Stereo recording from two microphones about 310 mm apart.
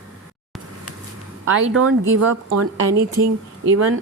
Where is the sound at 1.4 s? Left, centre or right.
Right.